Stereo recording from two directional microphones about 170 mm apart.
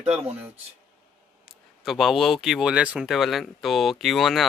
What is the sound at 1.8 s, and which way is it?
Speech, centre (ahead or behind).